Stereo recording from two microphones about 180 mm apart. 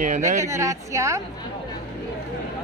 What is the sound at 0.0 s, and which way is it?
Speech, 45° right (ahead or behind).